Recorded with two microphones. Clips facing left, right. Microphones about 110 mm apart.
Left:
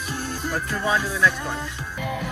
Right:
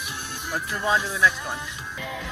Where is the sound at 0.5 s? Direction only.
20° right (ahead or behind).